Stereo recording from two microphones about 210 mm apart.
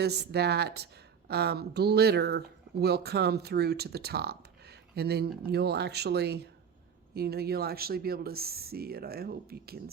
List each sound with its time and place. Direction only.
0.0 s speech: 50° right (ahead or behind)